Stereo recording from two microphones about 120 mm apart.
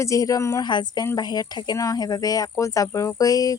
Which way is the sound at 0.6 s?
35° left (ahead or behind).